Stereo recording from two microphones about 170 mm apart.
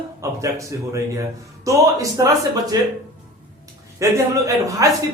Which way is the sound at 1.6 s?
20° right (ahead or behind).